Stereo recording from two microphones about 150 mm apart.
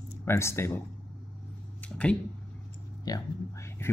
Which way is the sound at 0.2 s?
15° left (ahead or behind).